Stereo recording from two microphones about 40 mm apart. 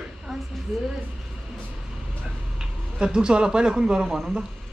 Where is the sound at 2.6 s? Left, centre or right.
Centre.